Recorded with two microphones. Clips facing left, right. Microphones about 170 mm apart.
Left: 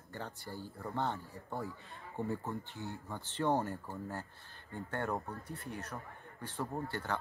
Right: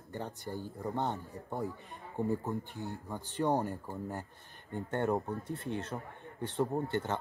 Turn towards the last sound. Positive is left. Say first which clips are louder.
# right 5 dB
turn(degrees=-20)  # may be behind; listen again after turning